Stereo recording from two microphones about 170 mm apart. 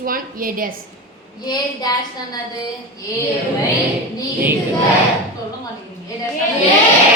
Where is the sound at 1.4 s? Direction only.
25° left (ahead or behind).